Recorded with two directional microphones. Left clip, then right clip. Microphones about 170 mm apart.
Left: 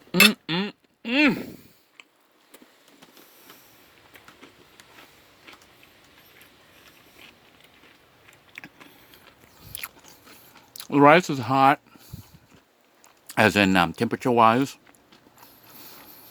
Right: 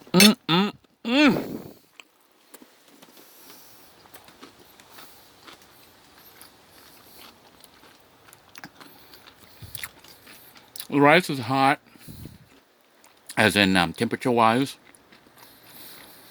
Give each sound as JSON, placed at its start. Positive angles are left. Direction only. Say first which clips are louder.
{"t": 0.1, "sound": "chink", "louder": "even", "side_deg": -35}
{"t": 9.7, "sound": "biting", "louder": "even", "side_deg": 10}
{"t": 10.8, "sound": "a sound", "louder": "left 2 dB", "side_deg": 10}
{"t": 13.2, "sound": "speech", "louder": "even", "side_deg": 10}
{"t": 15.4, "sound": "vehicle", "louder": "right 1 dB", "side_deg": 10}